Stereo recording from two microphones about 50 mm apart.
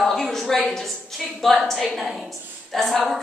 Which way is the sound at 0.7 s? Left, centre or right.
Centre.